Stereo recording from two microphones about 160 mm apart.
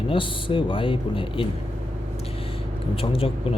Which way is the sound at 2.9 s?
35° left (ahead or behind).